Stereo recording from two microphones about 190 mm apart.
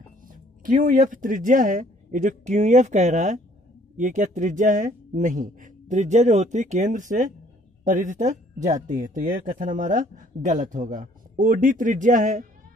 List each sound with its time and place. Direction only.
0.3 s speech: 45° right (ahead or behind)